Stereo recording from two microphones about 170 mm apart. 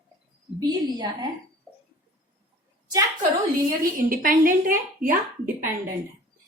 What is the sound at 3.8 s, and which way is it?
Speech, 55° right (ahead or behind).